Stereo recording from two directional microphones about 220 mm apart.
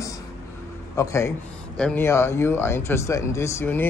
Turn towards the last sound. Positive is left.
turn(degrees=10)  # may be behind; listen again after turning